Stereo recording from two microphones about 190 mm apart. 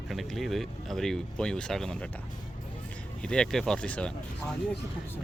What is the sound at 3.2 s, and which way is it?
Speech, 5° left (ahead or behind).